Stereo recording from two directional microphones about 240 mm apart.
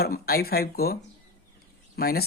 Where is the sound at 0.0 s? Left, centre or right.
Left.